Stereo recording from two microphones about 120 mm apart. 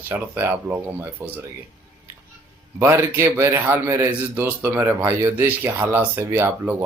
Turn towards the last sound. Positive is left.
turn(degrees=-20)  # may be behind; listen again after turning